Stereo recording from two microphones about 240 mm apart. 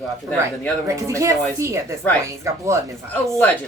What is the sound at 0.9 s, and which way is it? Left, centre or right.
Speech, centre.